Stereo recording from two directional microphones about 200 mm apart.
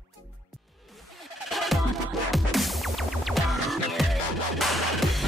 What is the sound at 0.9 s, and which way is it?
Music, centre (ahead or behind).